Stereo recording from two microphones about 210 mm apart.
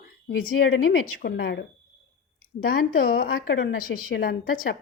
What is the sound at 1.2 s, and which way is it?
Speech, 50° left (ahead or behind).